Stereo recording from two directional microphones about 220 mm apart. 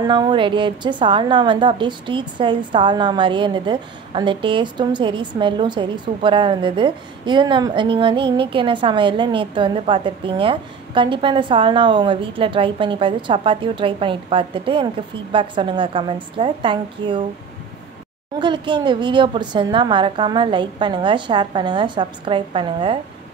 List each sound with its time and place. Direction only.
0.0 s a woman's voice: 20° right (ahead or behind)
18.4 s a woman's voice: 20° right (ahead or behind)